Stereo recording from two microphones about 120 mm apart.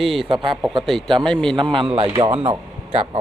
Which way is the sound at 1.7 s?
50° right (ahead or behind).